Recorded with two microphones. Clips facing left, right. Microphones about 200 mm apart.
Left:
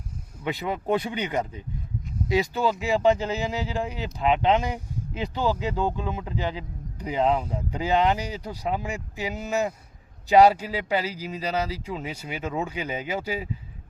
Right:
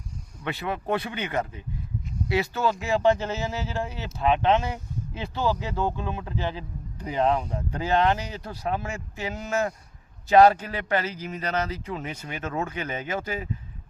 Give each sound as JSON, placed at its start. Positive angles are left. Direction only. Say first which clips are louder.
{"t": 0.4, "sound": "speech", "louder": "left 2 dB", "side_deg": 15}